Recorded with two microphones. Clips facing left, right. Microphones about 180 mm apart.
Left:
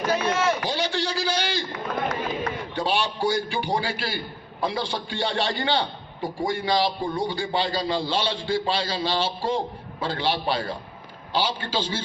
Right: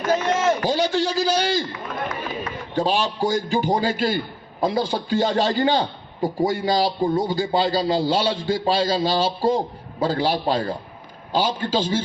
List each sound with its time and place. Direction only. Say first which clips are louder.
0.1 s a sound: right 4 dB; 45° right (ahead or behind)
1.1 s a man's voice: right 6 dB; 40° right (ahead or behind)
2.7 s a man's voice: right 5 dB; 40° right (ahead or behind)